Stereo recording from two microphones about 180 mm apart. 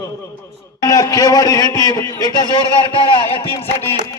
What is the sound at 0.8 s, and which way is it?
A man's voice, 20° left (ahead or behind).